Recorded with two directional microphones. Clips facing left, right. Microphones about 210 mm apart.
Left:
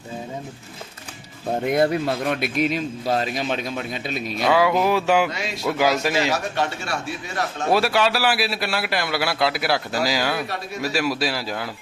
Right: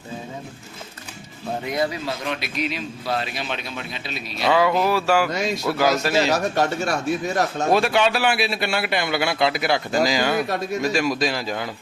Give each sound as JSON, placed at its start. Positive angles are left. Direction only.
{"t": 1.6, "sound": "a man's voice", "side_deg": 55}
{"t": 4.4, "sound": "a sound", "side_deg": 5}
{"t": 6.3, "sound": "speech", "side_deg": -45}
{"t": 7.7, "sound": "a man's voice", "side_deg": 5}